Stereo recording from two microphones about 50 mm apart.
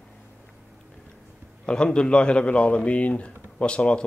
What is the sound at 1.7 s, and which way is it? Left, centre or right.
Speech, centre.